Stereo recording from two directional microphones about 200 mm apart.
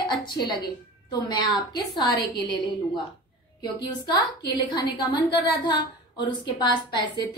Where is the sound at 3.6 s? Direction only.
20° left (ahead or behind).